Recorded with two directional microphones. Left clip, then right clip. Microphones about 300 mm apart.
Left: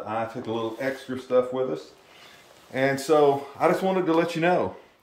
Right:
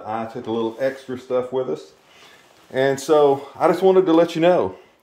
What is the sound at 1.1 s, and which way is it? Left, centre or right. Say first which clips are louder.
Speech: right 1 dB; right.